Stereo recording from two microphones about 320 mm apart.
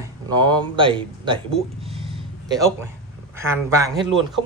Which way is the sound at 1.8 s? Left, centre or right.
Centre.